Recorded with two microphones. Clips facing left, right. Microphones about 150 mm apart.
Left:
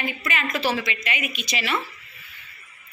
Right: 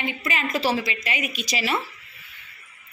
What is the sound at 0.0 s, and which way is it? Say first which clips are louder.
A woman's voice: even; 30° right (ahead or behind).